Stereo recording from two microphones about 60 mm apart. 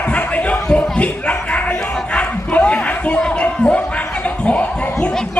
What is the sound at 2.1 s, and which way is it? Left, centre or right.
Dog, left.